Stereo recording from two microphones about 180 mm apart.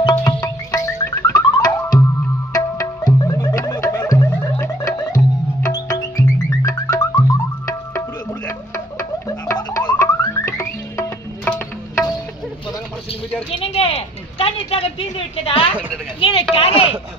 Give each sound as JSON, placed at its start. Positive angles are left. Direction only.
{"t": 0.1, "sound": "music", "side_deg": 20}
{"t": 9.3, "sound": "music", "side_deg": 20}
{"t": 13.5, "sound": "a sound", "side_deg": 30}